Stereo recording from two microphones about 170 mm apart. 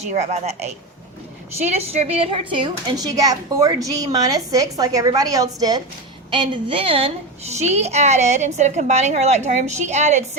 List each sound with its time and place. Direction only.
0.0 s a woman's voice: 40° right (ahead or behind)